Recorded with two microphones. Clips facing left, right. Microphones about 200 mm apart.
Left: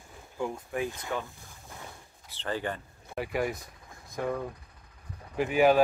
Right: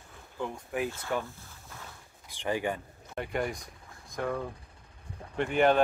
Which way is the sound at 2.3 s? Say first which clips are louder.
Right 2 dB; 15° right (ahead or behind).